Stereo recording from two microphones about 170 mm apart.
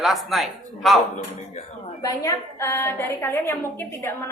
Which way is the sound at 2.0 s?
20° left (ahead or behind).